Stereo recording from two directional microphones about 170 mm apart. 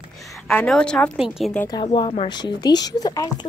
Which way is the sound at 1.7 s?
25° left (ahead or behind).